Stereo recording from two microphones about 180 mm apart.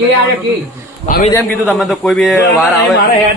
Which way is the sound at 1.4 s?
Centre (ahead or behind).